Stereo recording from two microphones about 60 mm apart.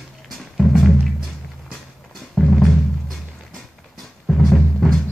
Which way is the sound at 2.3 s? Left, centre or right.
Centre.